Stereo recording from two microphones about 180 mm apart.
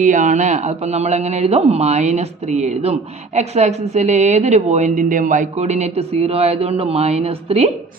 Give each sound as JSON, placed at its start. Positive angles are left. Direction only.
{"t": 0.0, "sound": "speech", "side_deg": -45}